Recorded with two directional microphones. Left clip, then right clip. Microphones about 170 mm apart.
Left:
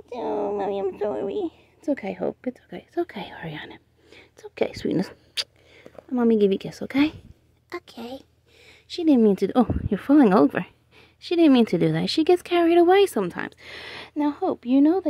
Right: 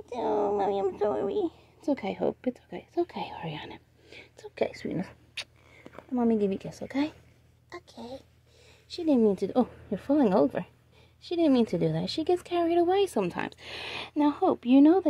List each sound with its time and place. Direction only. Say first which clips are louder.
0.0 s a woman's voice: left 1 dB; 15° left (ahead or behind)
4.9 s speech: left 9 dB; 85° left
5.8 s speech: left 5 dB; 45° left (ahead or behind)
13.2 s speech: left 3 dB; 15° left (ahead or behind)